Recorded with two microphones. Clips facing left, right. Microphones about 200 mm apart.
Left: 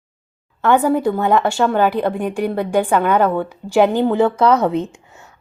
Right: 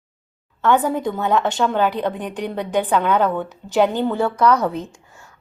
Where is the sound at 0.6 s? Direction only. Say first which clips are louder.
Left 3 dB; 10° left (ahead or behind).